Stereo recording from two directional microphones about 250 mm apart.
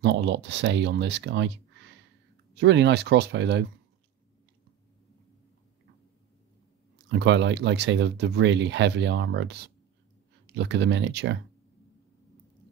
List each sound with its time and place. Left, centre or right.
0.0 s speech: right
7.1 s speech: right